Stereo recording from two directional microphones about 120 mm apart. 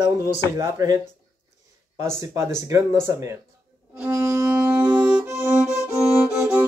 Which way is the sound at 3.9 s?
15° right (ahead or behind).